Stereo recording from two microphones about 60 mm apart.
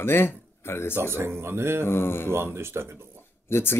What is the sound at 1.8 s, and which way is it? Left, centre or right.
Speech, left.